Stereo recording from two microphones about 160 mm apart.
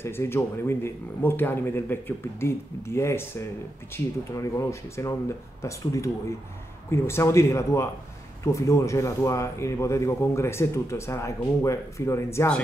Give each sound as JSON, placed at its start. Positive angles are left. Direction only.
{"t": 0.0, "sound": "a man's voice", "side_deg": 15}